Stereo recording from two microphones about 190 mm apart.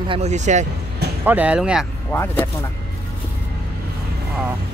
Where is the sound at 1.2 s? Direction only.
10° right (ahead or behind).